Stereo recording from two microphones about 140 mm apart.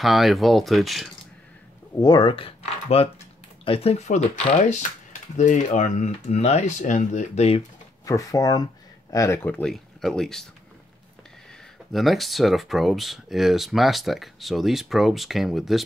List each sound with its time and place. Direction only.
0.0 s speech: centre (ahead or behind)
2.0 s speech: 30° left (ahead or behind); by 7.6 s 50° left (ahead or behind)
8.0 s speech: 25° left (ahead or behind); by 10.4 s 5° left (ahead or behind)
11.9 s speech: centre (ahead or behind)